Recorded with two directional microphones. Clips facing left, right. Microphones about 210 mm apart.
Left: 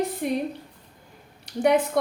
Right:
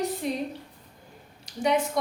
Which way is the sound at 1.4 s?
60° left (ahead or behind).